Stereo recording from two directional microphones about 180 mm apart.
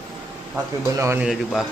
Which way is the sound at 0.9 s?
15° right (ahead or behind).